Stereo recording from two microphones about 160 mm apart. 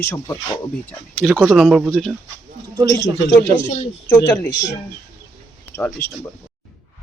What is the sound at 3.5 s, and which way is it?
Speech, 45° left (ahead or behind).